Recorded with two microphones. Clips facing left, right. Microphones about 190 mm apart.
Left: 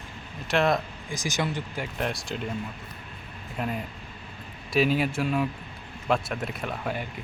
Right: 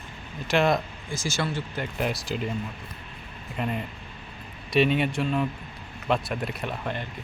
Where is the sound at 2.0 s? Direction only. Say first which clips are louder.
Right 3 dB; centre (ahead or behind).